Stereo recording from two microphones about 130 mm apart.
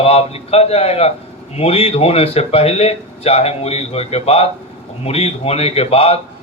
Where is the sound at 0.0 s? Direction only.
50° left (ahead or behind).